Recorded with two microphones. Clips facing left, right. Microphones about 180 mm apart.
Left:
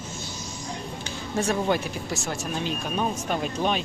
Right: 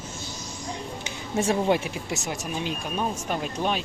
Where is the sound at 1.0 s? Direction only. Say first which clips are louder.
Right 1 dB; 25° right (ahead or behind).